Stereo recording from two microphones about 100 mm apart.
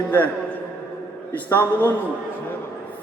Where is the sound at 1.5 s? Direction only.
20° left (ahead or behind).